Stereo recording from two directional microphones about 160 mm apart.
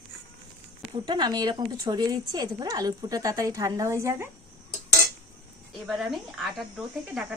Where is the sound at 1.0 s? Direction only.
25° right (ahead or behind).